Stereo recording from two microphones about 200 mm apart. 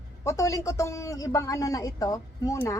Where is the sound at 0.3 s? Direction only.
15° left (ahead or behind).